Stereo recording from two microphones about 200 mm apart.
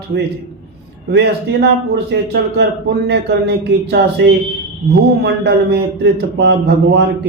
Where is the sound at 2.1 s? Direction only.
55° right (ahead or behind).